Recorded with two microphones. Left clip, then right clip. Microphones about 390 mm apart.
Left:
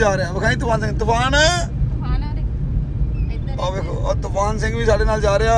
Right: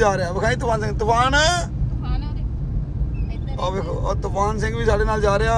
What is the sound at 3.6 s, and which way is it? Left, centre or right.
Speech, centre.